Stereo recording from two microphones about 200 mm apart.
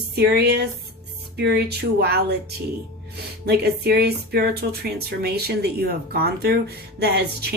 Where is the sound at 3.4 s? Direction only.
55° right (ahead or behind).